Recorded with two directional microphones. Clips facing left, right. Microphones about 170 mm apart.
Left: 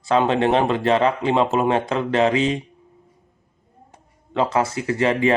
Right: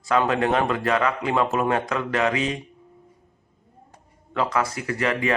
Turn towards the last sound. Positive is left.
turn(degrees=25)  # may be behind; listen again after turning